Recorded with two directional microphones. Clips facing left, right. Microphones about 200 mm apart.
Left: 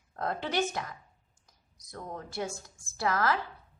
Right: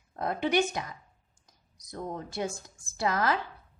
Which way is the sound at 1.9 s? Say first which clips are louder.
Right 4 dB; 20° right (ahead or behind).